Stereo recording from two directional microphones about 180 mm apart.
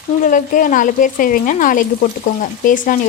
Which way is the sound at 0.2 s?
45° left (ahead or behind).